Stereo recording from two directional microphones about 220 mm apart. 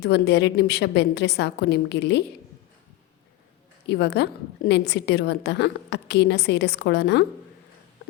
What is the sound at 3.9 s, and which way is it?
A woman's voice, 50° left (ahead or behind).